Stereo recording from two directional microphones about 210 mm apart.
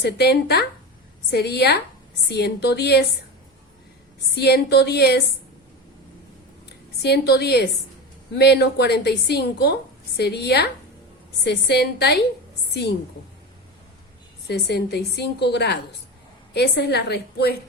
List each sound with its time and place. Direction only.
0.0 s a woman's voice: 50° left (ahead or behind)
4.4 s a woman's voice: 50° left (ahead or behind)
7.0 s a woman's voice: 50° left (ahead or behind)
14.4 s a woman's voice: 50° left (ahead or behind)